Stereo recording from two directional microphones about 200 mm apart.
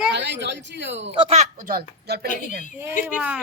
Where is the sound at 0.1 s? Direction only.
60° right (ahead or behind).